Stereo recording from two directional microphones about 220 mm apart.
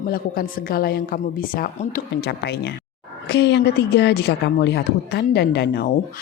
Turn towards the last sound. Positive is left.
turn(degrees=45)  # may be behind; listen again after turning